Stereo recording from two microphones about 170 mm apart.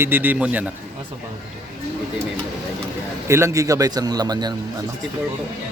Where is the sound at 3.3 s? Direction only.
15° right (ahead or behind).